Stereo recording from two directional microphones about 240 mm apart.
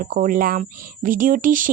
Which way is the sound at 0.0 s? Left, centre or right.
Right.